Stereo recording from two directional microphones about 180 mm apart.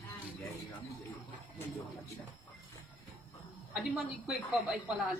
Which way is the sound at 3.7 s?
Centre (ahead or behind).